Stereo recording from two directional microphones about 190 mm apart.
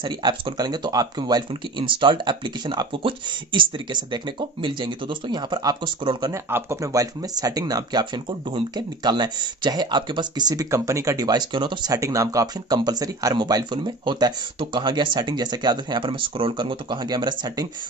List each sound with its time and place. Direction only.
0.0 s speech: 25° right (ahead or behind)